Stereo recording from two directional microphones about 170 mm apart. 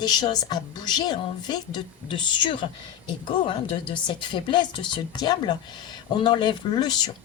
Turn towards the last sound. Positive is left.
turn(degrees=25)  # may be behind; listen again after turning